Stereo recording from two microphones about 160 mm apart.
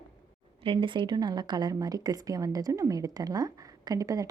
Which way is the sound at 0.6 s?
30° right (ahead or behind).